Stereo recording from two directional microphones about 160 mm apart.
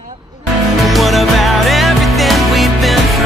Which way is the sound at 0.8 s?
Centre (ahead or behind).